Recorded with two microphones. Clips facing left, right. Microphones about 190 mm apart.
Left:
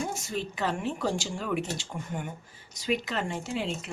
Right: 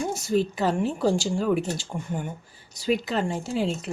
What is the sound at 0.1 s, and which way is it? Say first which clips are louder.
Speech: right 9 dB; 35° right (ahead or behind).